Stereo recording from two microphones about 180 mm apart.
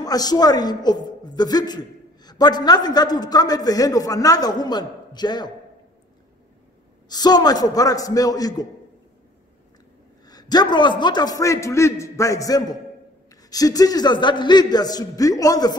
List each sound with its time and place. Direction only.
0.0 s a man's voice: 20° left (ahead or behind)
7.1 s a man's voice: 20° left (ahead or behind)
10.2 s a man's voice: 20° left (ahead or behind)